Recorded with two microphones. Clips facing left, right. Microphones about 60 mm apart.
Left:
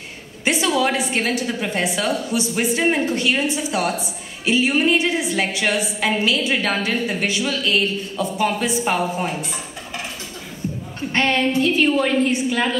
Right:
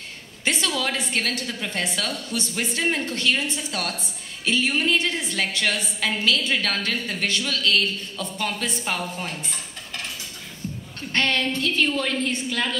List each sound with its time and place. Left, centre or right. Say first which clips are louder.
0.5 s a woman's voice: left 6 dB; centre